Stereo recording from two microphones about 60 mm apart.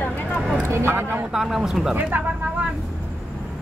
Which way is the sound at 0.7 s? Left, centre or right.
Right.